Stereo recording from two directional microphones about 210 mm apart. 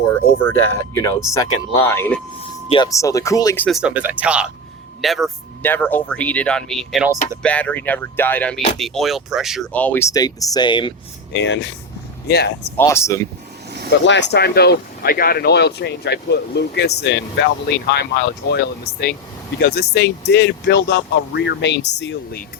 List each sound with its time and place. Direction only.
0.1 s speech: 10° left (ahead or behind)
2.6 s speech: 20° left (ahead or behind)
3.7 s speech: 5° right (ahead or behind); by 10.9 s 20° left (ahead or behind)
11.4 s speech: 60° left (ahead or behind)
12.7 s speech: 10° left (ahead or behind)
14.0 s speech: 55° left (ahead or behind)
19.5 s speech: 50° left (ahead or behind)